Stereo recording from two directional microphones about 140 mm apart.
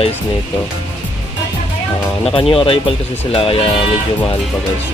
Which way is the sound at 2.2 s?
40° left (ahead or behind).